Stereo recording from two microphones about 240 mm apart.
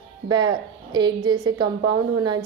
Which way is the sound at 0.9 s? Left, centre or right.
Centre.